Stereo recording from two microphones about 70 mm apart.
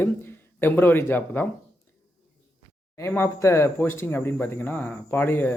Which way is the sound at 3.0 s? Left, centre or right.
Left.